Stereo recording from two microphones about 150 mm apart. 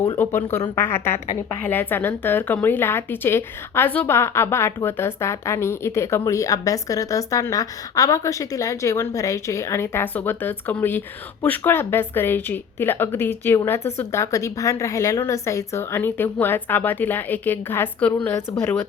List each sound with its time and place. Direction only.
0.2 s a woman's voice: 15° left (ahead or behind)